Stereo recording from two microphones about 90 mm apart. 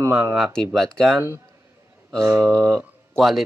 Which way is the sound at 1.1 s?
25° right (ahead or behind).